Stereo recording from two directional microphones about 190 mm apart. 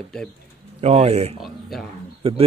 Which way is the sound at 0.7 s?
35° right (ahead or behind).